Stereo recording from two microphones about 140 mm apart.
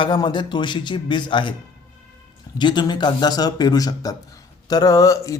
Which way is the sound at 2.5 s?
30° left (ahead or behind).